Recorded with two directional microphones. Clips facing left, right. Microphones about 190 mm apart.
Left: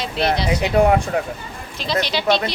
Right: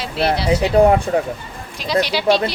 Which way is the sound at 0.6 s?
35° right (ahead or behind).